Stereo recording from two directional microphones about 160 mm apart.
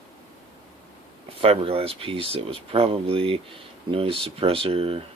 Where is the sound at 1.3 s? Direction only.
35° right (ahead or behind).